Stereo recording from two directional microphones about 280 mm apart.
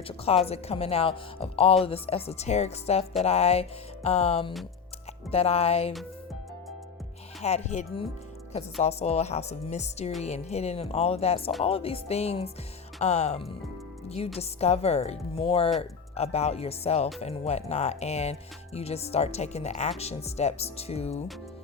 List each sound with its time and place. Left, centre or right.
0.4 s speech: left
7.4 s speech: left